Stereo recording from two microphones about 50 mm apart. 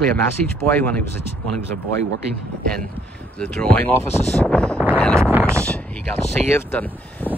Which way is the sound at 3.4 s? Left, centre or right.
Centre.